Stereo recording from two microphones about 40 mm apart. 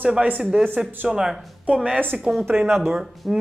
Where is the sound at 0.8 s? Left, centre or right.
Centre.